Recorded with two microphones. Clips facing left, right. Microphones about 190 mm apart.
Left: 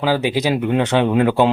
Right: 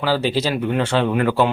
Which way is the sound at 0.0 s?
15° left (ahead or behind).